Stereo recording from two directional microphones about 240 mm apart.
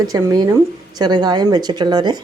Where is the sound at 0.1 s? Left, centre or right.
Centre.